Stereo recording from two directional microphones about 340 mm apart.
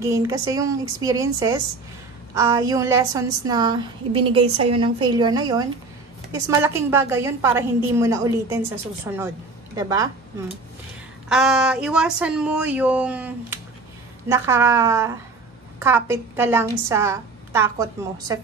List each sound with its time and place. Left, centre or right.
0.0 s a woman's voice: centre
11.2 s a woman's voice: centre